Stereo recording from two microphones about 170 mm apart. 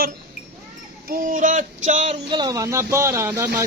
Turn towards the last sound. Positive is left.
turn(degrees=-10)  # may be behind; listen again after turning